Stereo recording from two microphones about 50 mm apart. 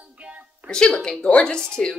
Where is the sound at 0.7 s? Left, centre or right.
Centre.